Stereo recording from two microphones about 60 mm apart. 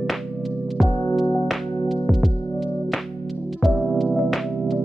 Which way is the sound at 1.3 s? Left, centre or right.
Centre.